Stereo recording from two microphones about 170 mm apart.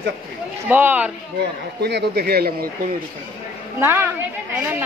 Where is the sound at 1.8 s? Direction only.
80° right; by 2.9 s 60° right (ahead or behind).